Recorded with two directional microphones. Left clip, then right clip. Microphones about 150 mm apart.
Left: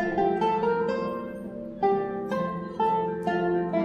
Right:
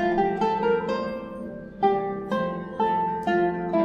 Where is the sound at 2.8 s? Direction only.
30° left (ahead or behind).